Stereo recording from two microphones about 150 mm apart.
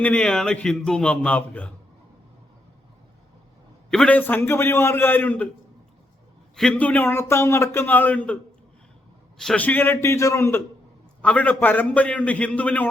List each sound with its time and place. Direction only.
0.0 s a man's voice: 10° left (ahead or behind)
3.8 s a man's voice: 5° left (ahead or behind)
6.6 s a man's voice: 5° left (ahead or behind)
9.4 s a man's voice: 5° left (ahead or behind)
11.2 s a man's voice: 10° left (ahead or behind)